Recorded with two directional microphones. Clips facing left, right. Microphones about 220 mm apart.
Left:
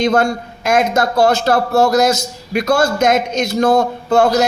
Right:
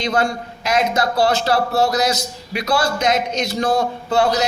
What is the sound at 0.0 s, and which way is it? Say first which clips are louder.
A man's voice: left 6 dB; 50° left (ahead or behind).